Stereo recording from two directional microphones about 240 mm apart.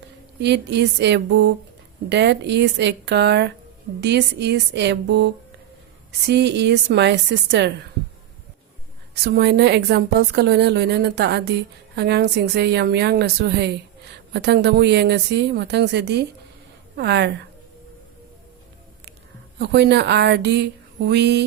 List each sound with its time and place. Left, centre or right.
0.3 s a woman's voice: right
9.1 s a woman's voice: right
19.5 s a woman's voice: right